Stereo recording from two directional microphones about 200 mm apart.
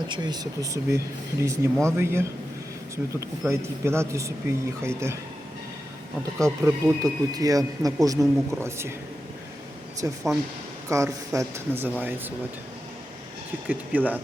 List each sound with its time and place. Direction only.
0.1 s speech: 20° right (ahead or behind)
6.4 s speech: 15° right (ahead or behind)
10.0 s speech: 10° right (ahead or behind)
13.7 s speech: 10° right (ahead or behind)